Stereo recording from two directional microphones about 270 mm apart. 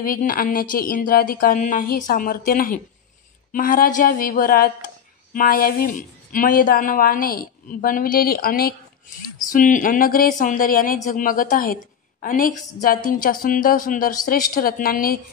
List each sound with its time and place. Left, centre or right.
0.0 s speech: left